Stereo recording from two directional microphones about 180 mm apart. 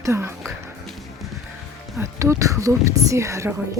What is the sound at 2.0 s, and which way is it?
Speech, 15° right (ahead or behind).